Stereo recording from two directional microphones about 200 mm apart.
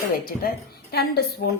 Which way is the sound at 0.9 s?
50° left (ahead or behind).